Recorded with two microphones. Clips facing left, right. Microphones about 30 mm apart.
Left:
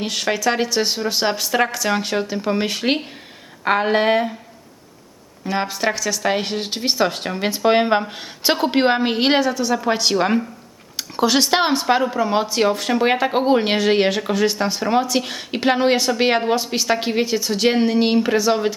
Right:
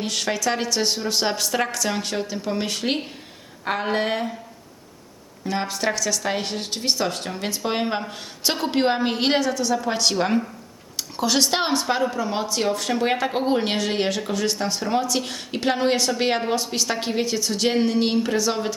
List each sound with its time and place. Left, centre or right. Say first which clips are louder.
0.0 s speech: left 4 dB; centre
5.5 s speech: left 3 dB; centre